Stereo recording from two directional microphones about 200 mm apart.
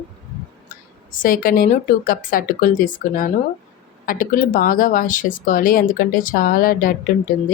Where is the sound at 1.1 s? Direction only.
45° left (ahead or behind).